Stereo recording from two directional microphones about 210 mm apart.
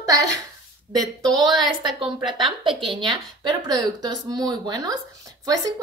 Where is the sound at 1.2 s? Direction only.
20° right (ahead or behind).